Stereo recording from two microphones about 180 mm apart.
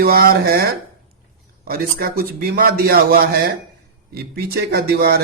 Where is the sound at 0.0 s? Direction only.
60° right (ahead or behind).